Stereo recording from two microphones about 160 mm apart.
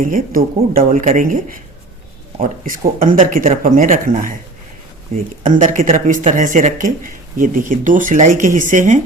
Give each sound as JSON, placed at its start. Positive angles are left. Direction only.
{"t": 0.0, "sound": "speech", "side_deg": -60}